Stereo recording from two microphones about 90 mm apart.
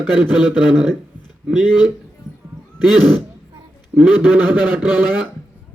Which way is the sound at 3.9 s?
15° right (ahead or behind).